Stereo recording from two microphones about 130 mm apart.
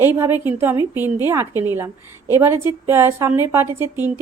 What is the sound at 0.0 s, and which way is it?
A woman's voice, 20° right (ahead or behind).